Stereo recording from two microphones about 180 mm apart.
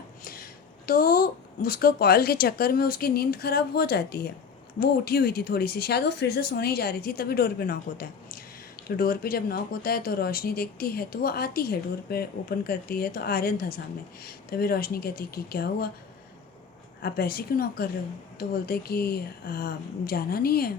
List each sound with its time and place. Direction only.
0.9 s speech: 55° left (ahead or behind)
17.0 s speech: 60° left (ahead or behind)